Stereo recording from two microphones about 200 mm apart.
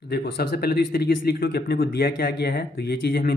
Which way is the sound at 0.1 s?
50° left (ahead or behind).